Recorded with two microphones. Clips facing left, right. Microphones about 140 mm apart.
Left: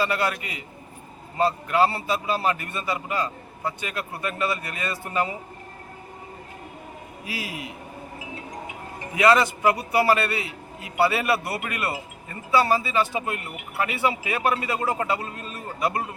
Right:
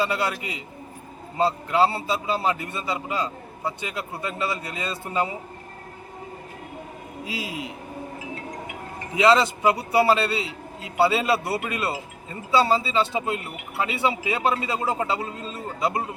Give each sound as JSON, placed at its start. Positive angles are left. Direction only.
{"t": 0.0, "sound": "a man's voice", "side_deg": -20}
{"t": 7.3, "sound": "a man's voice", "side_deg": -25}
{"t": 9.1, "sound": "a man's voice", "side_deg": -20}